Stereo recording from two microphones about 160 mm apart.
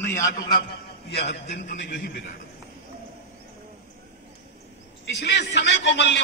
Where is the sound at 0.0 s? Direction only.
20° left (ahead or behind).